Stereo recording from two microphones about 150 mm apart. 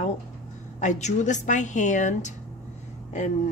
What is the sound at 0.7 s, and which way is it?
A woman's voice, 50° left (ahead or behind).